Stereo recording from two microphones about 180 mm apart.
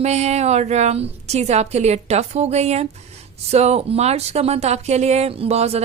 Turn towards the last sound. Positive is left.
turn(degrees=-35)  # may be behind; listen again after turning